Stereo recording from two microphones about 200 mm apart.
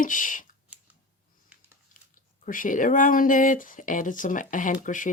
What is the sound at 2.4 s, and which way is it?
Speech, 40° left (ahead or behind).